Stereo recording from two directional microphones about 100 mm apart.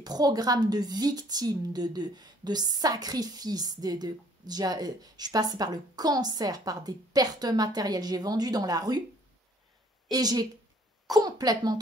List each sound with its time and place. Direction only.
0.0 s a woman's voice: 40° right (ahead or behind)
10.1 s a woman's voice: 40° right (ahead or behind)